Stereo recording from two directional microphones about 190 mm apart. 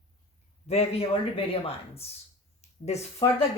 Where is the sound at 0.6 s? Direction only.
30° left (ahead or behind).